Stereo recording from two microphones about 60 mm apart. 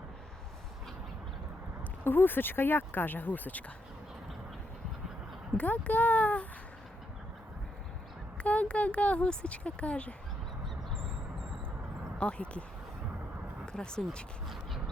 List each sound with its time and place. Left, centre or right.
2.0 s speech: left
5.5 s speech: left
8.4 s speech: left
12.2 s speech: centre
13.7 s speech: centre